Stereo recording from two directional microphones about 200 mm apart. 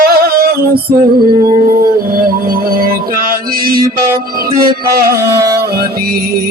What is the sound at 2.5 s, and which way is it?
Music, 45° right (ahead or behind).